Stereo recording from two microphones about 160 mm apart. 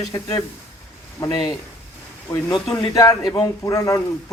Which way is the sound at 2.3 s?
20° left (ahead or behind).